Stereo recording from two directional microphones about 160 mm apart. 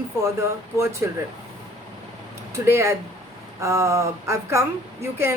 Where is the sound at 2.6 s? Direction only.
15° right (ahead or behind).